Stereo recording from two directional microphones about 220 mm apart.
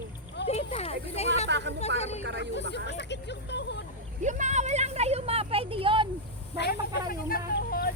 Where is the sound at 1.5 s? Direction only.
55° right (ahead or behind).